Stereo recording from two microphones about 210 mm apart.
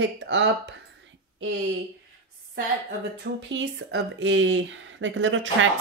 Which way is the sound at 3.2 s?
60° right (ahead or behind).